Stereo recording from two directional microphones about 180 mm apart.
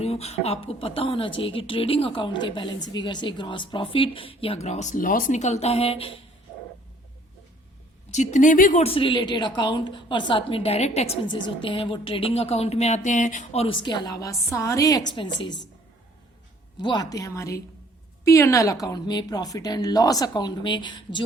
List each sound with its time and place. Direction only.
0.0 s a woman's voice: 35° left (ahead or behind)
8.1 s speech: 45° left (ahead or behind)
8.8 s a woman's voice: 30° left (ahead or behind)
16.8 s a woman's voice: 25° left (ahead or behind)